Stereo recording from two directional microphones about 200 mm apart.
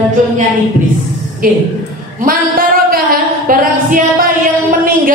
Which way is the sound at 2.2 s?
45° right (ahead or behind).